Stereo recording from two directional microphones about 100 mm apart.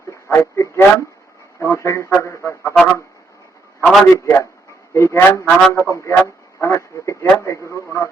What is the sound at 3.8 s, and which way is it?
Speech, centre (ahead or behind).